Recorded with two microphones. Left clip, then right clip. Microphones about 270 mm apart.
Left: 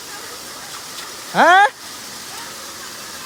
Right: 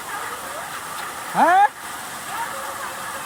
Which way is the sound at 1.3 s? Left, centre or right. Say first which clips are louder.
Left 4 dB; left.